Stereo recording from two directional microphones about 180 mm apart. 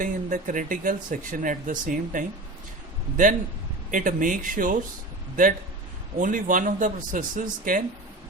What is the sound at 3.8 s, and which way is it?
Speech, 45° right (ahead or behind).